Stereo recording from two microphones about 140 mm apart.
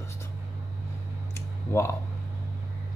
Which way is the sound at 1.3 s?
20° left (ahead or behind).